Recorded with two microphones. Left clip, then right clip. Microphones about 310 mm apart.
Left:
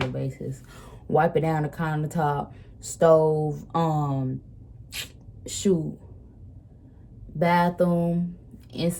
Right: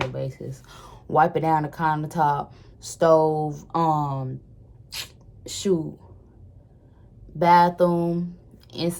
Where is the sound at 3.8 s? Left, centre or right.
Centre.